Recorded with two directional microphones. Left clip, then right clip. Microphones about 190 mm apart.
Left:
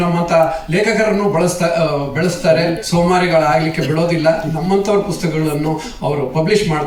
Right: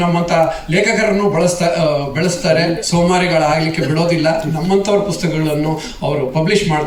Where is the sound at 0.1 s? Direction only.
20° right (ahead or behind).